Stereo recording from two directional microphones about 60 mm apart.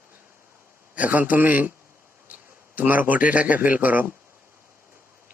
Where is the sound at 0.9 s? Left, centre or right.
Right.